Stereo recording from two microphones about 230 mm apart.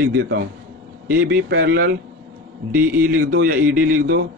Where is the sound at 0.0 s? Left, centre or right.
Right.